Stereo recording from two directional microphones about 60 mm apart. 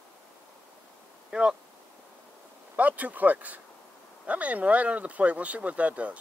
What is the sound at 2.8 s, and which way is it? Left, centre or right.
Speech, right.